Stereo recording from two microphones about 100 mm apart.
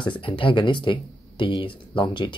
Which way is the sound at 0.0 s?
55° left (ahead or behind).